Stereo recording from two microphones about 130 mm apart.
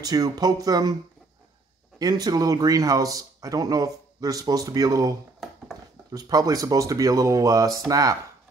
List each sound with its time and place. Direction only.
0.0 s speech: 30° right (ahead or behind)
2.0 s speech: 30° right (ahead or behind)
6.1 s speech: 30° right (ahead or behind)